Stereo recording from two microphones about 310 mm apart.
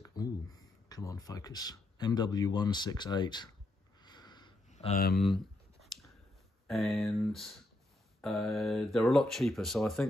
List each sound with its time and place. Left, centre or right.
0.0 s speech: centre
4.0 s a sound: centre; by 5.2 s left
6.7 s speech: centre